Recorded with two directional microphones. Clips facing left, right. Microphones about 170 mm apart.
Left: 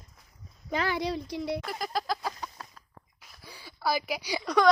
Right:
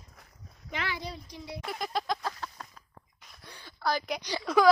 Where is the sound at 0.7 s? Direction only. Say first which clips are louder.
Left 6 dB; 40° left (ahead or behind).